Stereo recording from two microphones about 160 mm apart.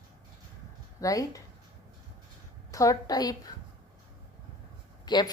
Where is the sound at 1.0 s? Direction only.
20° left (ahead or behind).